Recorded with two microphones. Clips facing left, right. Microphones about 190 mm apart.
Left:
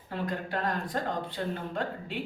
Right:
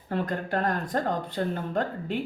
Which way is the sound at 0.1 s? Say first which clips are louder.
Right 5 dB; 50° right (ahead or behind).